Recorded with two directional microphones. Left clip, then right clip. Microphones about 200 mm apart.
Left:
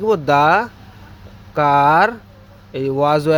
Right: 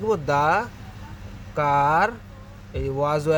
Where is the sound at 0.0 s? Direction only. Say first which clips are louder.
Left 7 dB; 30° left (ahead or behind).